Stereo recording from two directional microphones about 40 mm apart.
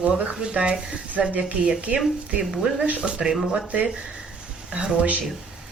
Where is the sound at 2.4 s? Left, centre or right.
Centre.